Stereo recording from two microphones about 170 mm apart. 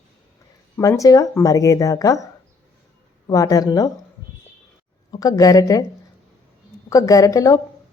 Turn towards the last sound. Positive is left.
turn(degrees=20)  # may be behind; listen again after turning